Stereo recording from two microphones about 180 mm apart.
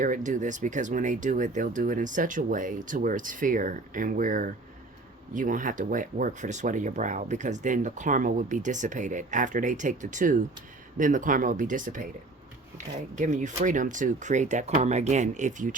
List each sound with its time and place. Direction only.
0.0 s speech: 45° right (ahead or behind)